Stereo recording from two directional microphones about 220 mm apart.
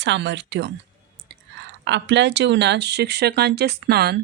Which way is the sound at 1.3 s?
55° right (ahead or behind).